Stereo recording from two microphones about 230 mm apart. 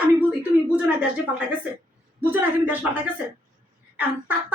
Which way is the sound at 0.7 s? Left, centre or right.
Centre.